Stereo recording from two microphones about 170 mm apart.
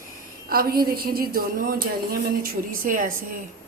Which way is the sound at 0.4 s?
60° right (ahead or behind).